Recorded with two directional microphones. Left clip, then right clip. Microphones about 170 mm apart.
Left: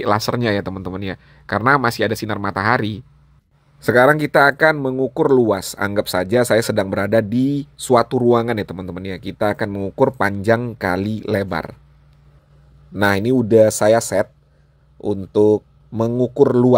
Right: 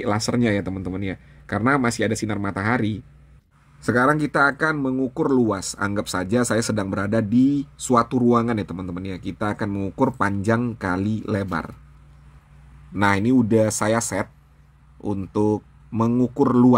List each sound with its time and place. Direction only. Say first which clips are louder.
0.0 s speech: left 5 dB; 25° left (ahead or behind)
13.0 s speech: left 3 dB; 30° left (ahead or behind)